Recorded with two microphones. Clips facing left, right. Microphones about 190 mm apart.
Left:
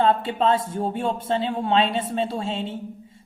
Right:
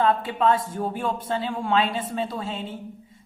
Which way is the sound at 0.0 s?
25° left (ahead or behind).